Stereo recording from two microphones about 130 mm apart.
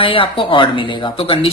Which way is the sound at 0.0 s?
40° left (ahead or behind).